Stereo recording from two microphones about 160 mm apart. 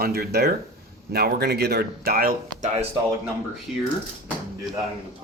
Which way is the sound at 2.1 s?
65° right (ahead or behind).